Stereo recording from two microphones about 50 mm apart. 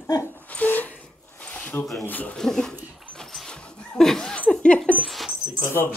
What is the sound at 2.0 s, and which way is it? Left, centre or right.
Speech, left.